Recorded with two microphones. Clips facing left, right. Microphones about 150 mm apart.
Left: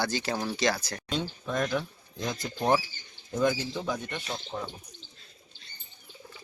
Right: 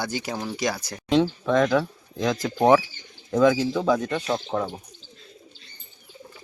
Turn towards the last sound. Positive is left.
turn(degrees=-85)